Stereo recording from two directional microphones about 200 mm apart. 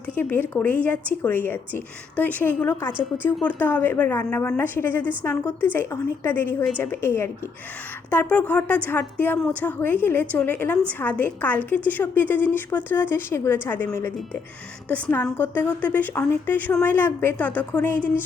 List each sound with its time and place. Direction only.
0.2 s a woman's voice: 10° left (ahead or behind)